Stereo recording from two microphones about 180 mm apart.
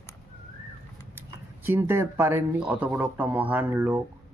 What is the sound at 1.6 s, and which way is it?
Speech, 10° right (ahead or behind).